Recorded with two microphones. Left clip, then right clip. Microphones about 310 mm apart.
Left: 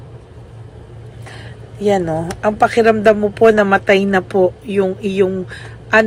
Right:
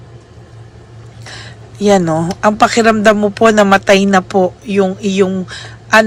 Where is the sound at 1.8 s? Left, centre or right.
Centre.